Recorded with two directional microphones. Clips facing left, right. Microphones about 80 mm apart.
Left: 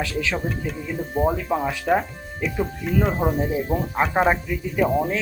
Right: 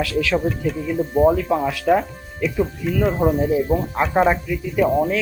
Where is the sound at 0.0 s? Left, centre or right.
Left.